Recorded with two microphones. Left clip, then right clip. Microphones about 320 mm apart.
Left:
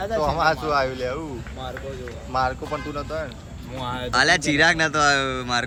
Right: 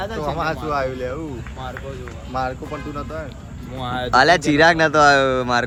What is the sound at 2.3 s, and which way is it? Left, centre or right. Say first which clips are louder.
Speech: left 1 dB; left.